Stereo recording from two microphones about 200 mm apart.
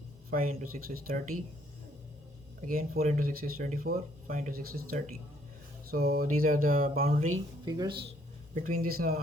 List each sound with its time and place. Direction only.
0.3 s speech: 45° right (ahead or behind)
2.6 s speech: 45° right (ahead or behind)
7.6 s speech: 20° right (ahead or behind)
8.5 s speech: 45° right (ahead or behind)